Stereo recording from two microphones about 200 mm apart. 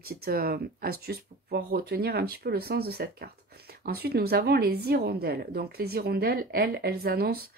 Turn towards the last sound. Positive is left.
turn(degrees=-50)  # may be behind; listen again after turning